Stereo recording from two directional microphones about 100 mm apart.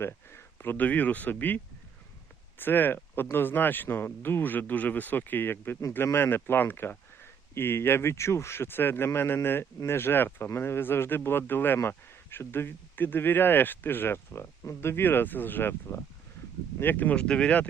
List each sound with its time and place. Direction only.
0.0 s speech: 25° left (ahead or behind)